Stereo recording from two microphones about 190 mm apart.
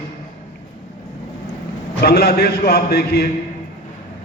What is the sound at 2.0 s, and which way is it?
A man's voice, 55° left (ahead or behind).